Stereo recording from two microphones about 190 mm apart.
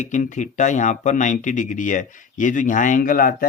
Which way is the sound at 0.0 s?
40° left (ahead or behind).